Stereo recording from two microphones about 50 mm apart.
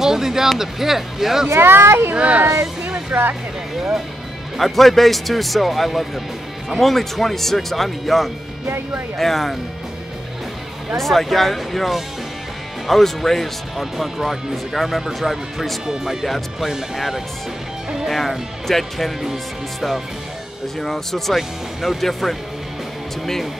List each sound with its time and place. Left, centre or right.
0.0 s speech: centre
1.6 s speech: right
2.1 s speech: right
3.1 s speech: right
4.6 s speech: centre
11.0 s speech: centre
20.8 s speech: centre